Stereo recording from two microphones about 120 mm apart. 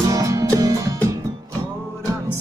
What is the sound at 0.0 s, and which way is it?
Music, 25° right (ahead or behind).